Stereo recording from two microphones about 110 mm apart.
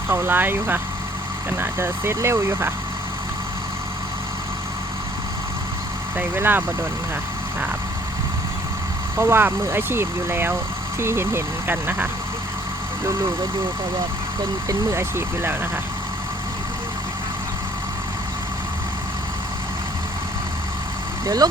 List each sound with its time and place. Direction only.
0.1 s speech: 20° right (ahead or behind)
6.1 s speech: 15° right (ahead or behind)
9.1 s speech: 20° right (ahead or behind)
14.7 s speech: 25° right (ahead or behind)